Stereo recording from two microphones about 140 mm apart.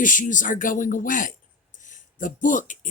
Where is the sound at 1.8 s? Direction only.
65° left (ahead or behind).